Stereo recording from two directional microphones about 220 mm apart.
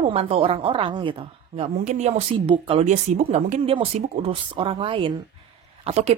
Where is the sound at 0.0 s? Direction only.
25° right (ahead or behind).